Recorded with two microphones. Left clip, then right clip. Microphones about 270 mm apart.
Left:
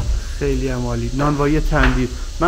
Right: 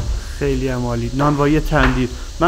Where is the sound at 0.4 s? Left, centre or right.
Centre.